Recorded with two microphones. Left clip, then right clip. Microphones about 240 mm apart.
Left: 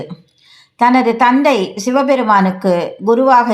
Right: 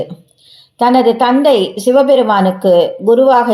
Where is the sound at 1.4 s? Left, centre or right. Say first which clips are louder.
Right 4 dB; centre.